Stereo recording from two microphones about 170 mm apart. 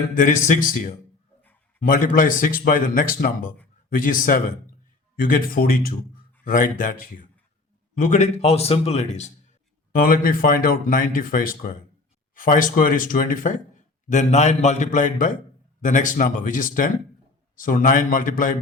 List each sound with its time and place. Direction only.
0.2 s speech: 50° left (ahead or behind)
7.9 s a man's voice: 45° left (ahead or behind)
9.9 s speech: 55° left (ahead or behind)